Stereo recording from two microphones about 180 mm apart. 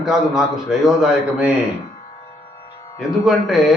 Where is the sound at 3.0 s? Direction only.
Centre (ahead or behind).